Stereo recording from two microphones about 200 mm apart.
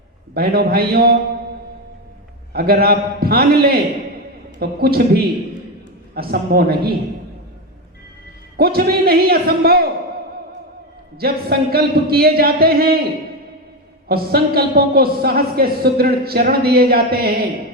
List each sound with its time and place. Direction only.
0.3 s speech: 50° right (ahead or behind)
2.5 s speech: 50° right (ahead or behind)
8.5 s speech: 50° right (ahead or behind)
11.2 s speech: 50° right (ahead or behind)
14.1 s speech: 50° right (ahead or behind)